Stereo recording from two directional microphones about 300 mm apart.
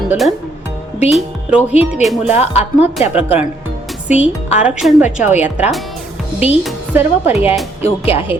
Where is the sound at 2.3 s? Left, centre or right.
Left.